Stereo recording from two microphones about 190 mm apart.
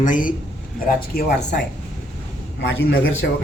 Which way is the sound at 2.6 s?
80° left.